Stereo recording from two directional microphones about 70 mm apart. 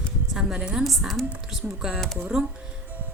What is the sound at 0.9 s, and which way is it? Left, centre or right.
A woman's voice, centre.